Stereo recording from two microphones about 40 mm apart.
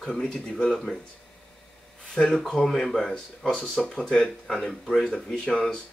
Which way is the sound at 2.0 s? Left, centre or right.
Centre.